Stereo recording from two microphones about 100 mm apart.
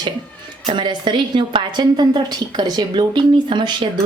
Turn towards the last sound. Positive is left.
turn(degrees=-50)  # may be behind; listen again after turning